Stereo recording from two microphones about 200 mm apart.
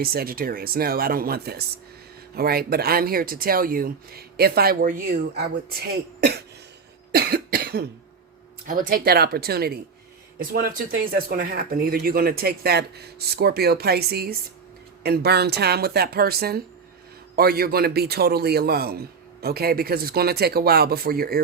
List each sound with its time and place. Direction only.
0.0 s speech: 50° right (ahead or behind)
7.1 s cough: 50° right (ahead or behind)
8.6 s speech: 45° right (ahead or behind)
11.0 s speech: 50° right (ahead or behind)